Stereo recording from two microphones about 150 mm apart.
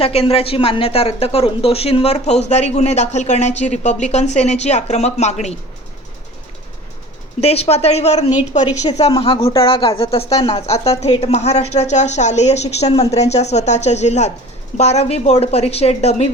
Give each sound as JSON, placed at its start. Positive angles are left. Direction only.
{"t": 0.0, "sound": "speech", "side_deg": 40}
{"t": 7.4, "sound": "speech", "side_deg": 45}
{"t": 9.2, "sound": "speech", "side_deg": 35}